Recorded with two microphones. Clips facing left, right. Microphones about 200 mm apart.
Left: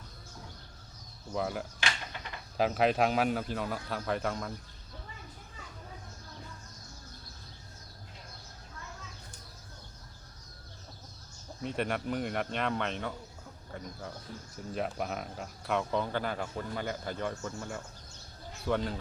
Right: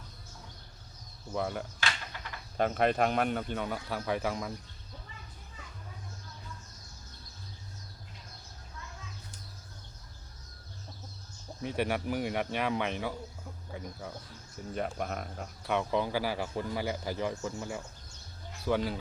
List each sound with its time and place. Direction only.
1.3 s a man's voice: centre (ahead or behind)
11.6 s a man's voice: 5° right (ahead or behind)